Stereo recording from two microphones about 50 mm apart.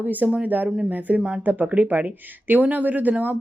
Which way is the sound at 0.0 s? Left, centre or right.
Right.